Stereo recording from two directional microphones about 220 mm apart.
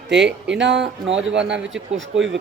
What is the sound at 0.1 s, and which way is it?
A man's voice, 50° right (ahead or behind).